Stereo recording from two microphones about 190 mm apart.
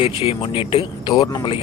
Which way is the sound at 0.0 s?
25° left (ahead or behind).